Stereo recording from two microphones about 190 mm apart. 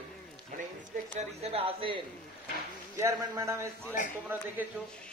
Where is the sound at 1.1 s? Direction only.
30° right (ahead or behind).